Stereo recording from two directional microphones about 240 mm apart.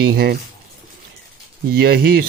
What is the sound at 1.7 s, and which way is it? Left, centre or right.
Speech, right.